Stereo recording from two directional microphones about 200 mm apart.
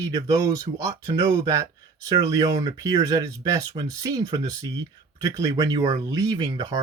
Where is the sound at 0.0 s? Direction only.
20° right (ahead or behind).